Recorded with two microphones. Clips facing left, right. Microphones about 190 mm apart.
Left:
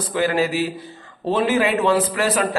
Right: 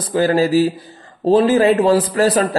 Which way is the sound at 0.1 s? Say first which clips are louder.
Right 6 dB; 35° right (ahead or behind).